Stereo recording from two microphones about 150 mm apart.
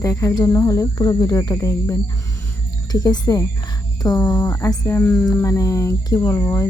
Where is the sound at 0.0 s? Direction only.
20° left (ahead or behind).